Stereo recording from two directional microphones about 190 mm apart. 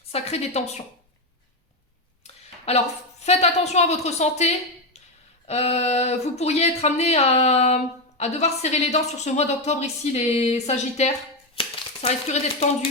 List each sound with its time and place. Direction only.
0.1 s a woman's voice: 35° left (ahead or behind)
2.2 s a sound: 35° left (ahead or behind)
3.2 s a woman's voice: 35° left (ahead or behind)